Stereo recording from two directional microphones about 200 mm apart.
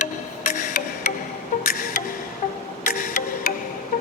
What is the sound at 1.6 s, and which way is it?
Music, 45° left (ahead or behind).